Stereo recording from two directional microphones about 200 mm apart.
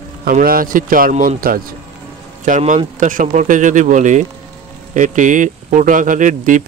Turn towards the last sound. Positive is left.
turn(degrees=-40)  # may be behind; listen again after turning